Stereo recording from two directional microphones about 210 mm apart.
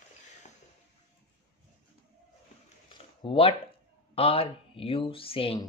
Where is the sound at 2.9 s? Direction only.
25° left (ahead or behind).